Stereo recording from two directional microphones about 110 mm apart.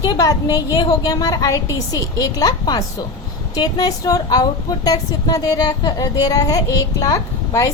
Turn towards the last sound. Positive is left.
turn(degrees=30)  # may be behind; listen again after turning